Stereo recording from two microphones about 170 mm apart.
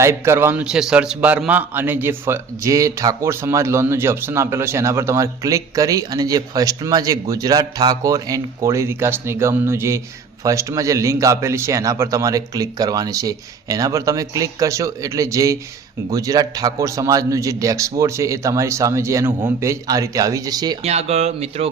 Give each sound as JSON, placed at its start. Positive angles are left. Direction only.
{"t": 0.0, "sound": "a man's voice", "side_deg": -15}
{"t": 20.8, "sound": "speech", "side_deg": -40}